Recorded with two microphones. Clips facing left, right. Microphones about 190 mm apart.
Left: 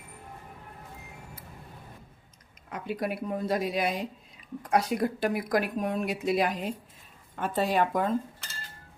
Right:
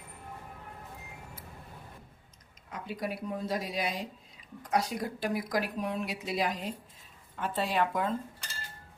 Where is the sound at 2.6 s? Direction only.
60° left (ahead or behind).